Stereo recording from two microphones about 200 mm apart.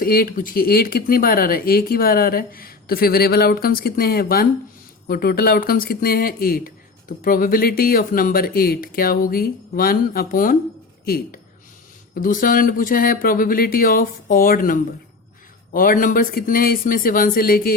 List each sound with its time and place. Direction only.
0.0 s speech: 45° left (ahead or behind)